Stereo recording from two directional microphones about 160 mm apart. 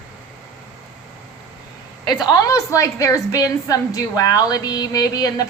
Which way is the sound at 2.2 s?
25° left (ahead or behind).